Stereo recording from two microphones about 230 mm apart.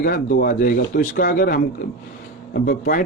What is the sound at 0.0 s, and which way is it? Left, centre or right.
Speech, left.